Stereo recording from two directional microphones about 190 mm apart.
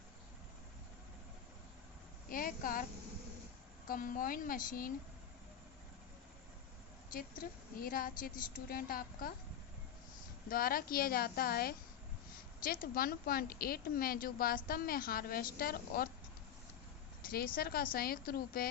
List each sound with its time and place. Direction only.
2.3 s a woman's voice: 45° left (ahead or behind)
3.8 s a woman's voice: 45° left (ahead or behind)
7.1 s a woman's voice: 50° left (ahead or behind)
10.5 s a woman's voice: 50° left (ahead or behind)
17.2 s a woman's voice: 50° left (ahead or behind)